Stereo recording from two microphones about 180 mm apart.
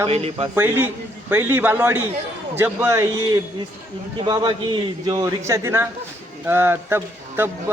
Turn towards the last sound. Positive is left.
turn(degrees=-10)  # may be behind; listen again after turning